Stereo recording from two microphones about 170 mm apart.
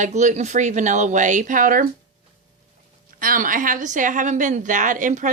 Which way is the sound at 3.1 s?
55° right (ahead or behind).